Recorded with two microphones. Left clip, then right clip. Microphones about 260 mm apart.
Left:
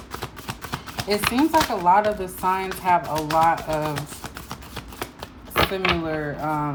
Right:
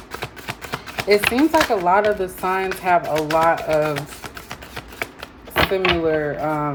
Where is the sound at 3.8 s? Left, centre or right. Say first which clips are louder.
Right 4 dB; centre.